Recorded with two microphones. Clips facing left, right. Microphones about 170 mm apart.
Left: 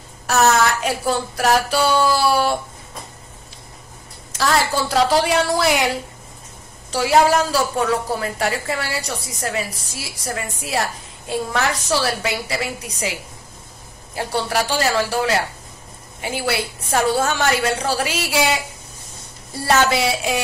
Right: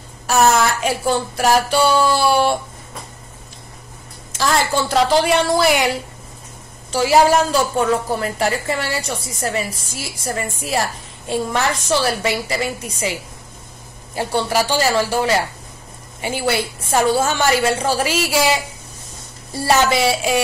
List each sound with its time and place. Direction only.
0.3 s a woman's voice: centre (ahead or behind)
4.4 s a woman's voice: centre (ahead or behind)
6.9 s a woman's voice: centre (ahead or behind)
14.1 s a woman's voice: centre (ahead or behind)